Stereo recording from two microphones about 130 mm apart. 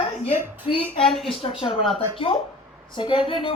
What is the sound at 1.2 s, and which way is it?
A man's voice, 45° left (ahead or behind).